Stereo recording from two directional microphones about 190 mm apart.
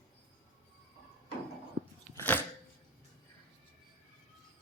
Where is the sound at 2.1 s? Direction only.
10° left (ahead or behind).